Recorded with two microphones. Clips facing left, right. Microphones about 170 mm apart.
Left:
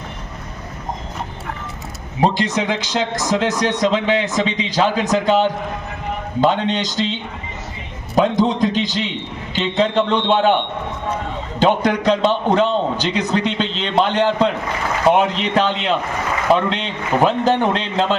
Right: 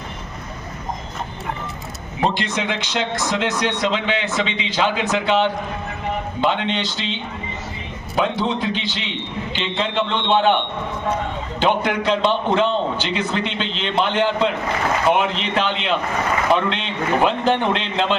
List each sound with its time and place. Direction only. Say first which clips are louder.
2.2 s a man's voice: left 4 dB; 40° left (ahead or behind)
11.6 s a man's voice: left 4 dB; 40° left (ahead or behind)